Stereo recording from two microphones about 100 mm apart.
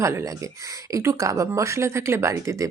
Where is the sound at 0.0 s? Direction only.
30° right (ahead or behind).